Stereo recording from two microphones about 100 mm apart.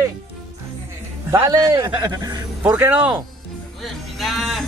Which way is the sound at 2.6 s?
15° right (ahead or behind).